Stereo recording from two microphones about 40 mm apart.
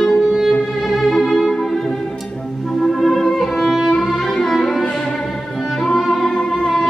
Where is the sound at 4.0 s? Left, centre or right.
Centre.